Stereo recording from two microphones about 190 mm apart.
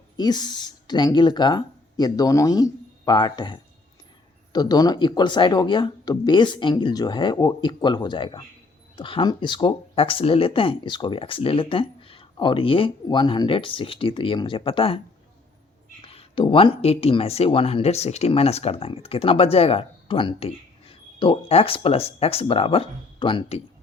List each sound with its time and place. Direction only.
0.2 s speech: 20° left (ahead or behind)
16.1 s speech: 25° left (ahead or behind)